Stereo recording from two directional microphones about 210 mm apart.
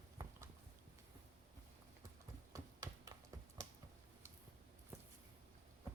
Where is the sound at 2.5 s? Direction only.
15° right (ahead or behind).